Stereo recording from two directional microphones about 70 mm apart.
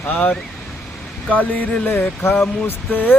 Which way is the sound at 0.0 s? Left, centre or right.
Left.